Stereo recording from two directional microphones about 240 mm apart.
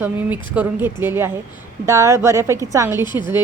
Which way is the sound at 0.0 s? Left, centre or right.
Centre.